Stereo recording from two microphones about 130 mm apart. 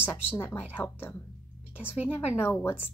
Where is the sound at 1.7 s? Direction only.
10° right (ahead or behind).